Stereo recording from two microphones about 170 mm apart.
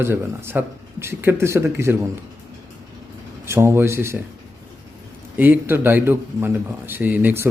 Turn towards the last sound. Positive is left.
turn(degrees=-10)  # may be behind; listen again after turning